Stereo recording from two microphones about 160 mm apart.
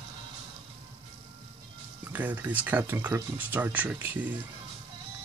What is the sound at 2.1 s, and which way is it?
Speech, 10° right (ahead or behind).